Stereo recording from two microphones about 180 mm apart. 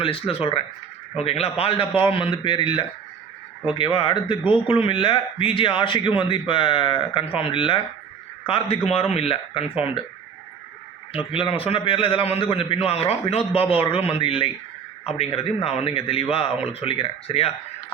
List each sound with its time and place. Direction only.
0.0 s a man's voice: 30° left (ahead or behind)
11.1 s a man's voice: 30° left (ahead or behind)